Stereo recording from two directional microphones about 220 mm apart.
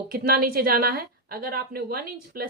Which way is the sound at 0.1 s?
40° right (ahead or behind).